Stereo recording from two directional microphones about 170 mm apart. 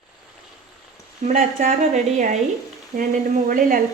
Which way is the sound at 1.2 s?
50° right (ahead or behind).